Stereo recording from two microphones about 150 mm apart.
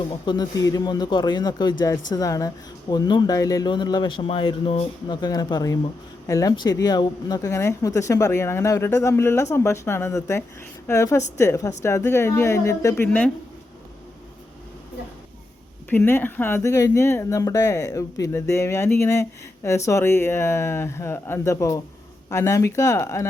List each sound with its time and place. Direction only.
0.3 s speech: 25° left (ahead or behind)
5.0 s speech: 25° left (ahead or behind)
13.1 s speech: 10° left (ahead or behind)
15.9 s speech: 15° left (ahead or behind)